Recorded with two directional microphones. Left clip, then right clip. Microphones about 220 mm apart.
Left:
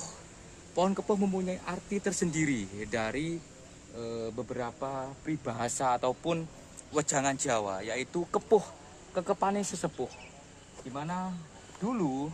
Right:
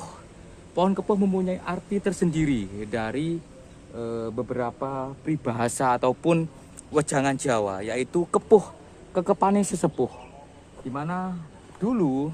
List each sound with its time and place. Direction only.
0.8 s speech: 15° right (ahead or behind)
4.2 s speech: 25° right (ahead or behind)
5.2 s speech: 40° right (ahead or behind)
10.9 s speech: 30° right (ahead or behind)
11.8 s speech: 40° right (ahead or behind)